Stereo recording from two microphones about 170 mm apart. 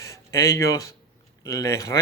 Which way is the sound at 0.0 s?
20° left (ahead or behind).